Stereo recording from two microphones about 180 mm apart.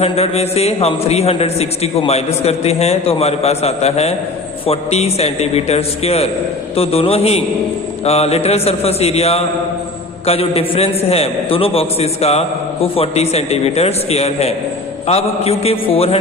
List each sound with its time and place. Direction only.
0.0 s a man's voice: 35° left (ahead or behind)